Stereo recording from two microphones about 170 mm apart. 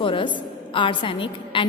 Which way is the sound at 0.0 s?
30° left (ahead or behind).